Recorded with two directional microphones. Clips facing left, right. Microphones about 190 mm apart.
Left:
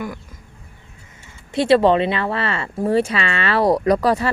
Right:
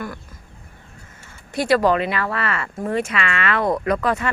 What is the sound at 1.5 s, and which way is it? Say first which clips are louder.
Speech: left 3 dB; 25° left (ahead or behind).